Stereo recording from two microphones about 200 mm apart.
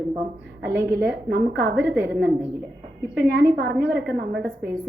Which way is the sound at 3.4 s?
55° right (ahead or behind).